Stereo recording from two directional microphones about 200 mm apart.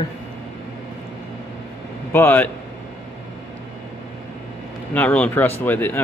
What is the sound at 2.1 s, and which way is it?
Speech, 10° left (ahead or behind).